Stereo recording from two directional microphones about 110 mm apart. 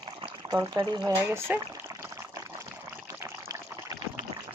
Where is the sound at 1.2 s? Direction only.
20° right (ahead or behind).